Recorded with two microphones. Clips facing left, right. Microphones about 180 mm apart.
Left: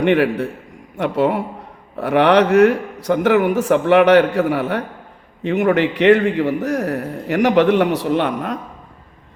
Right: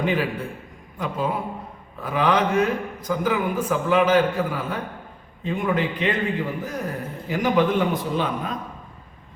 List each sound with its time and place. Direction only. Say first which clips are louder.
0.0 s a man's voice: left 8 dB; 70° left (ahead or behind)